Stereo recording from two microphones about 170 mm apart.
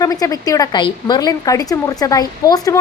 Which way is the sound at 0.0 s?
20° left (ahead or behind).